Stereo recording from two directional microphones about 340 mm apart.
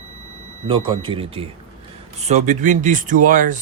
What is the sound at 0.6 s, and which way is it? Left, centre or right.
Speech, centre.